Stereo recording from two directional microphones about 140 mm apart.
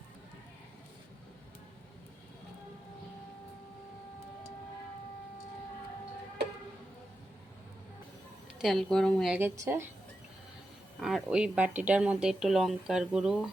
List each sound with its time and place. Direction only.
8.6 s speech: centre (ahead or behind)
9.3 s speech: 15° right (ahead or behind)
11.0 s speech: 5° right (ahead or behind)